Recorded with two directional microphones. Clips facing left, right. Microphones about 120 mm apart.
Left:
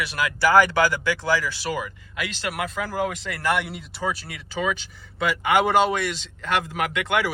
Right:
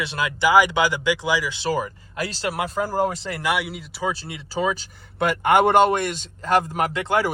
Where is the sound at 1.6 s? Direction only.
35° right (ahead or behind).